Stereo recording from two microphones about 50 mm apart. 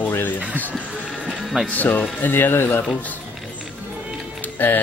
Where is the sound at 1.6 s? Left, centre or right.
Left.